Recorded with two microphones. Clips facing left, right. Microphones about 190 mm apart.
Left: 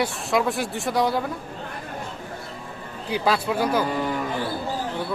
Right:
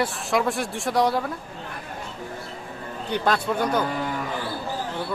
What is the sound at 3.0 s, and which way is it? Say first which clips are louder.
Speech: left 1 dB; 5° left (ahead or behind).